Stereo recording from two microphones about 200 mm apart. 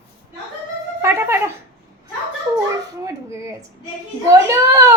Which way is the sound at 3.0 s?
15° right (ahead or behind).